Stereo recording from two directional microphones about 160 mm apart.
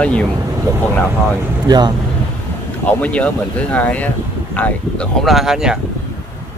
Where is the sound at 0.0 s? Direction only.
5° left (ahead or behind).